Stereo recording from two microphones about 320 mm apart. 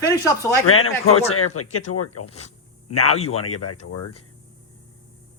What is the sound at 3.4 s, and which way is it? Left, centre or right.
Speech, left.